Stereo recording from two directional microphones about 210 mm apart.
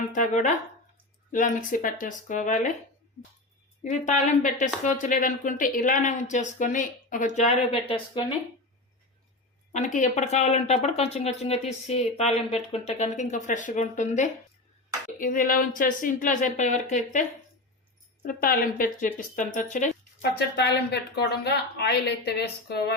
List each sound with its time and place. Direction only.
0.1 s a woman's voice: 35° left (ahead or behind)
3.8 s a woman's voice: 35° left (ahead or behind)
9.7 s a woman's voice: 35° left (ahead or behind)
18.3 s a woman's voice: 45° left (ahead or behind)
20.3 s speech: 50° left (ahead or behind)